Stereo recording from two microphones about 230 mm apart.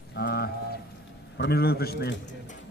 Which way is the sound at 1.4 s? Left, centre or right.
Left.